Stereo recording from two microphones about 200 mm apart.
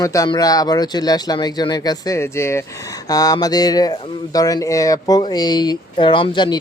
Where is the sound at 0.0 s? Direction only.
15° left (ahead or behind).